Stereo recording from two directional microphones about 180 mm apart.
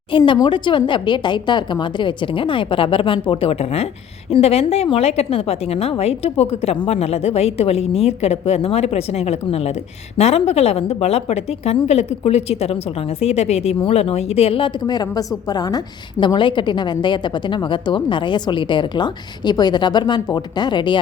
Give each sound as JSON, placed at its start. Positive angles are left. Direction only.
{"t": 0.1, "sound": "a woman's voice", "side_deg": 25}